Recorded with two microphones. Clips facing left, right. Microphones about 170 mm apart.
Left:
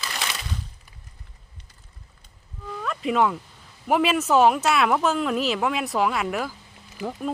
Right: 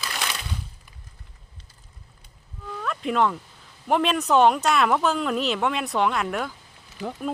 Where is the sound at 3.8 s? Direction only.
5° left (ahead or behind).